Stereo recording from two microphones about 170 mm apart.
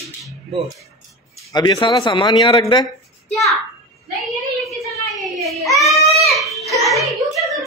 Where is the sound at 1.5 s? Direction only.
25° left (ahead or behind).